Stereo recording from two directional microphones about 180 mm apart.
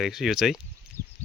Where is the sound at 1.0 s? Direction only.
20° right (ahead or behind).